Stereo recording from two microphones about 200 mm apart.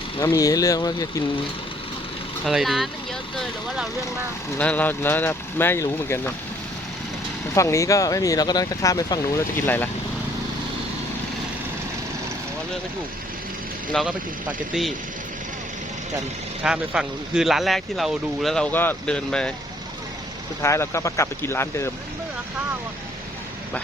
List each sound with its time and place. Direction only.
0.2 s speech: 15° left (ahead or behind)
2.4 s speech: centre (ahead or behind)
7.5 s speech: 15° left (ahead or behind)
13.9 s speech: 5° right (ahead or behind)
16.6 s speech: 5° right (ahead or behind)
20.6 s speech: 15° left (ahead or behind)